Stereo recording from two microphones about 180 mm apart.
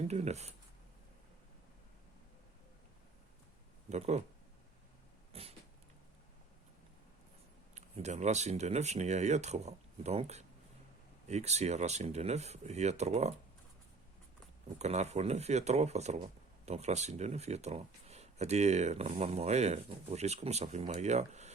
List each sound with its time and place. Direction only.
0.1 s speech: 35° right (ahead or behind)
3.8 s speech: 40° right (ahead or behind)
5.3 s cat: 35° right (ahead or behind)
7.8 s speech: 40° right (ahead or behind)
14.8 s speech: 40° right (ahead or behind)